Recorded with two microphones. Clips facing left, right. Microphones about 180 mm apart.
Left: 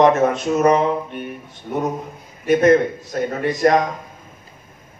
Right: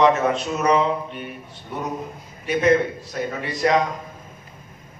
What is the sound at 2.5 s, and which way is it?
Speech, 50° left (ahead or behind).